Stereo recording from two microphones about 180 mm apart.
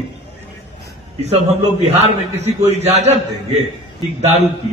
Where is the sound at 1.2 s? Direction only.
35° right (ahead or behind).